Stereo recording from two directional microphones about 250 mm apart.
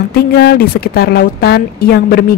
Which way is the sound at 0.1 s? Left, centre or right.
Left.